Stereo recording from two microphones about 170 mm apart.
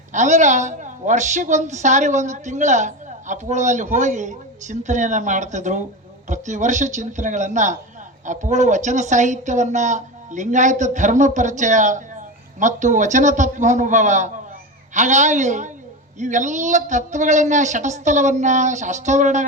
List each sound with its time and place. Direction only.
0.1 s a woman's voice: 45° right (ahead or behind)